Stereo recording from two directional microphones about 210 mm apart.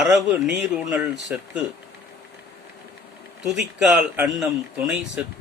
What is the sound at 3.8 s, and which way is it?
Speech, 5° right (ahead or behind).